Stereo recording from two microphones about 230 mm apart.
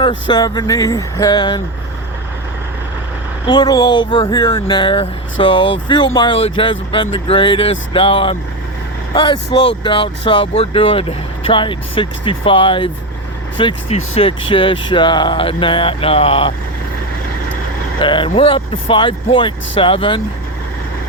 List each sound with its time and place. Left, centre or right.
0.0 s speech: centre
3.4 s speech: centre
18.0 s speech: left